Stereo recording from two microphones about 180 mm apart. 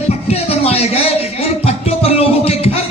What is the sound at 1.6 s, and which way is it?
Music, 35° left (ahead or behind).